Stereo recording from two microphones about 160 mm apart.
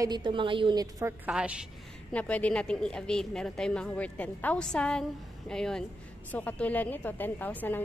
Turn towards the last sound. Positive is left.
turn(degrees=10)  # may be behind; listen again after turning